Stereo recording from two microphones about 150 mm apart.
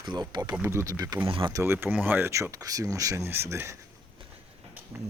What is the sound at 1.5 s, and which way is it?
Speech, 15° right (ahead or behind).